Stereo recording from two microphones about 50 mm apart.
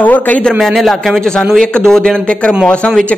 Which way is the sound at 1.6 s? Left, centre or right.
Centre.